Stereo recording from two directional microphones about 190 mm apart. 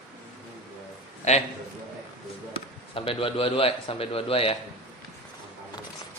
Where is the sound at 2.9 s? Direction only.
30° left (ahead or behind).